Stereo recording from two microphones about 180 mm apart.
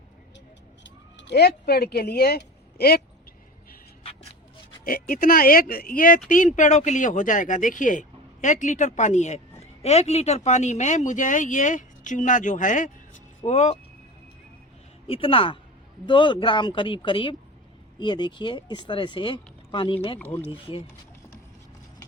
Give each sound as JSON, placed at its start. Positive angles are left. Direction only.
{"t": 0.9, "sound": "speech", "side_deg": 75}
{"t": 4.9, "sound": "speech", "side_deg": 55}
{"t": 15.0, "sound": "speech", "side_deg": 30}
{"t": 20.1, "sound": "speech", "side_deg": 10}
{"t": 20.5, "sound": "speech", "side_deg": 30}